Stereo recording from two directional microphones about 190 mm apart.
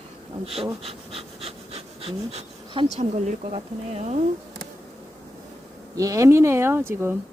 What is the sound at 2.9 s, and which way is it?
Speech, 35° right (ahead or behind).